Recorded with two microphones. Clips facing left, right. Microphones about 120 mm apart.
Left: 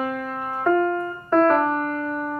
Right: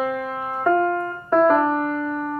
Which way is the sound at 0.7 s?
35° right (ahead or behind).